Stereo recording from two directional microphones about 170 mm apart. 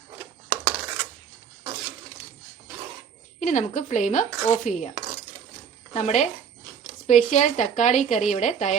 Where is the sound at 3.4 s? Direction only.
45° left (ahead or behind).